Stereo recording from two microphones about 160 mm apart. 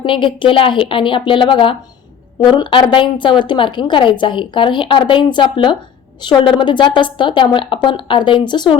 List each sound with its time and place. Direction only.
0.0 s a woman's voice: 30° left (ahead or behind)